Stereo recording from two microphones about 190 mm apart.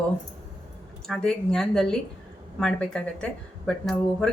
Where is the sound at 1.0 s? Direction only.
5° left (ahead or behind).